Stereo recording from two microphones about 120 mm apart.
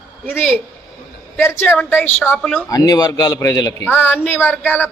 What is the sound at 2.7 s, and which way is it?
A man's voice, 30° left (ahead or behind).